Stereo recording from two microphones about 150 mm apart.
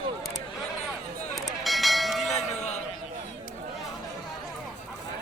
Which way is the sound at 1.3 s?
Centre (ahead or behind).